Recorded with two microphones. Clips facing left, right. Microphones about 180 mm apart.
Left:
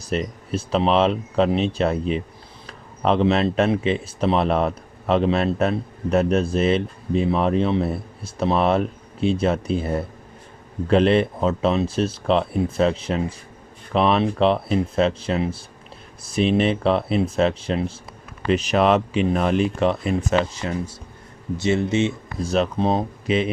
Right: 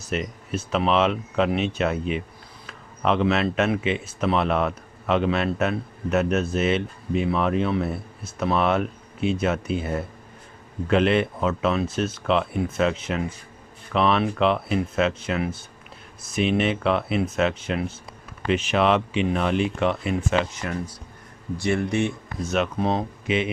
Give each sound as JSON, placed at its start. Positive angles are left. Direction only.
{"t": 0.1, "sound": "speech", "side_deg": 35}
{"t": 22.4, "sound": "speech", "side_deg": 35}